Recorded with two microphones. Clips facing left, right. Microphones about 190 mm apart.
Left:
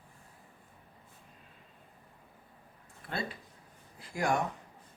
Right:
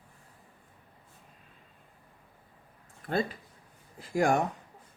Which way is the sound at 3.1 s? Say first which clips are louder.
Right 8 dB; 45° right (ahead or behind).